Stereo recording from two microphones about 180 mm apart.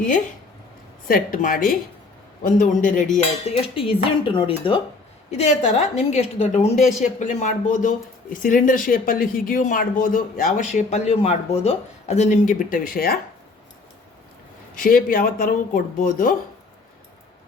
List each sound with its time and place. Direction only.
1.0 s a woman's voice: 50° left (ahead or behind)
3.2 s dishes: 30° left (ahead or behind)
5.3 s a woman's voice: 40° left (ahead or behind); by 13.1 s 55° left (ahead or behind)
14.8 s a woman's voice: 50° left (ahead or behind)